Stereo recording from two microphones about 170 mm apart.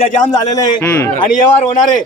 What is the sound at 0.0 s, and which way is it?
Speech, 50° left (ahead or behind).